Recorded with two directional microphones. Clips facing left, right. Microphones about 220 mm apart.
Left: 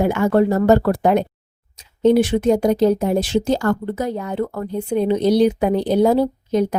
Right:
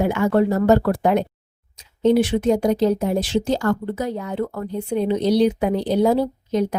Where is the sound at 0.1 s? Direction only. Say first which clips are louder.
Left 2 dB; 45° left (ahead or behind).